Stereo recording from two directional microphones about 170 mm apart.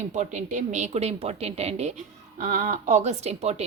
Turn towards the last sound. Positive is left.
turn(degrees=-40)  # may be behind; listen again after turning